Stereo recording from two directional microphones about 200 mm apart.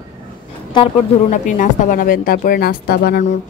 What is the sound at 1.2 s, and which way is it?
A woman's voice, 40° left (ahead or behind).